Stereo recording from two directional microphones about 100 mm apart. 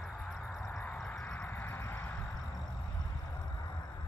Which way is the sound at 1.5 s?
20° left (ahead or behind).